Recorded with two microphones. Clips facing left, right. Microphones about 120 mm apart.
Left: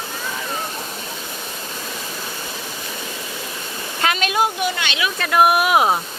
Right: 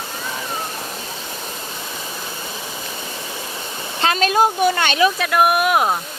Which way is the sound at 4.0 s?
35° right (ahead or behind).